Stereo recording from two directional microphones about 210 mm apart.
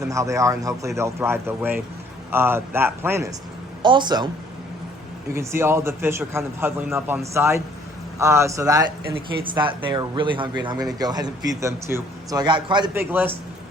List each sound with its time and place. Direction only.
0.0 s a man's voice: 15° right (ahead or behind)
5.3 s a man's voice: 10° right (ahead or behind)